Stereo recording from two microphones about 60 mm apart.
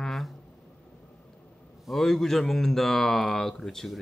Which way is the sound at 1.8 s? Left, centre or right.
Centre.